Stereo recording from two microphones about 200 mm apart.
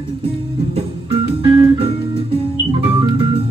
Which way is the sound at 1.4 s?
25° right (ahead or behind).